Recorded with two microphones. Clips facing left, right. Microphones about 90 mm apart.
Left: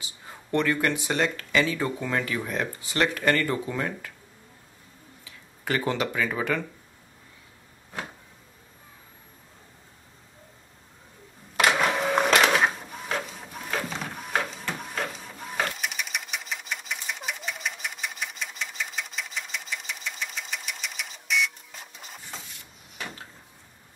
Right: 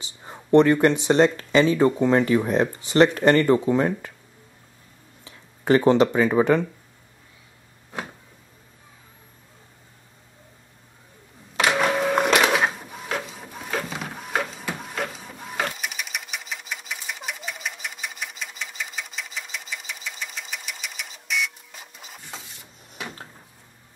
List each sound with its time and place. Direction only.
0.0 s speech: 25° right (ahead or behind)
5.2 s speech: 30° right (ahead or behind)
11.5 s printer: centre (ahead or behind)